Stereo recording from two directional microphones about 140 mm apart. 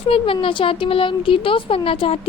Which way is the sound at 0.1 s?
40° left (ahead or behind).